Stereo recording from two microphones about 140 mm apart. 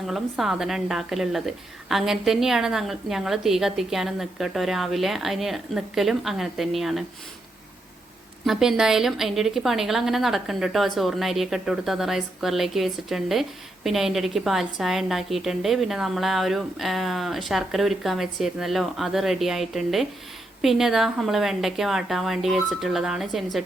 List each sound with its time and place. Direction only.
0.1 s a woman's voice: centre (ahead or behind)
8.4 s a woman's voice: centre (ahead or behind)